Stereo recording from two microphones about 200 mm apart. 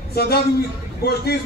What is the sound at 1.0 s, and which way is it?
Speech, 55° left (ahead or behind).